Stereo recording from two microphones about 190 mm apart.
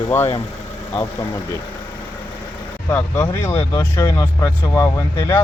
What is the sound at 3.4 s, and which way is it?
Speech, 15° left (ahead or behind).